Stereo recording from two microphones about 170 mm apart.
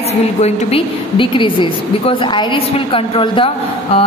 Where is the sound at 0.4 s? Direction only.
35° left (ahead or behind).